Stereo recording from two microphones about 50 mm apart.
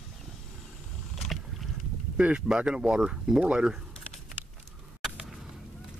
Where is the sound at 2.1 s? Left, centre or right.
Right.